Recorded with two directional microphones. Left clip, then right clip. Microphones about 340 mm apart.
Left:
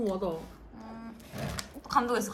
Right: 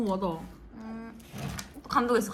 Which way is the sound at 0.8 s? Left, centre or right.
Centre.